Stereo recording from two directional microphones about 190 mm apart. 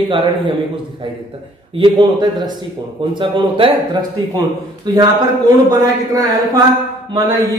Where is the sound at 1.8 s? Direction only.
20° right (ahead or behind).